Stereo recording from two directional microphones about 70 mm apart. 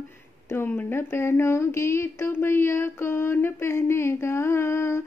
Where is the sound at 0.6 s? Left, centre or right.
Left.